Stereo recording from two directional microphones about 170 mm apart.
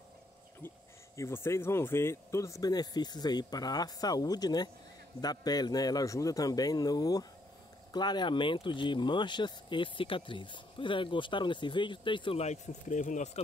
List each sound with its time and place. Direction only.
1.1 s speech: 15° left (ahead or behind); by 13.4 s 45° left (ahead or behind)